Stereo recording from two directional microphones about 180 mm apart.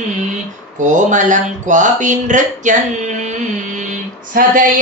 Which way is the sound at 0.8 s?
45° right (ahead or behind).